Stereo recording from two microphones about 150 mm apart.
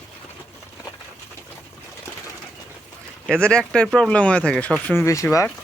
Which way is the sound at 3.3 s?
5° left (ahead or behind).